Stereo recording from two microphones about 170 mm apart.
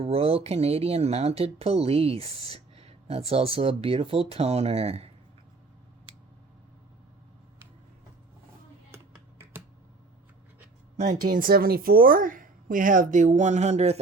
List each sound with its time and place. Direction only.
0.0 s speech: 35° right (ahead or behind)
10.9 s speech: 40° right (ahead or behind)
11.3 s speech: 55° right (ahead or behind); by 14.0 s 40° right (ahead or behind)